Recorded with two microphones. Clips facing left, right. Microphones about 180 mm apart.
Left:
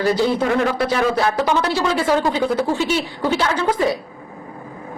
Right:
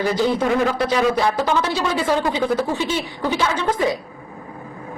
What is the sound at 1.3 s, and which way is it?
Speech, 15° right (ahead or behind).